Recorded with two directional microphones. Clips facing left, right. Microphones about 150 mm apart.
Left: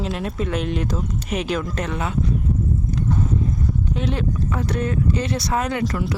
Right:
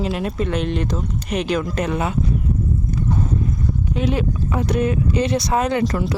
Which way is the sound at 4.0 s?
5° right (ahead or behind).